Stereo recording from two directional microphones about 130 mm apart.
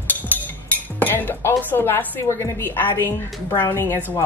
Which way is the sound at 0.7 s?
15° left (ahead or behind).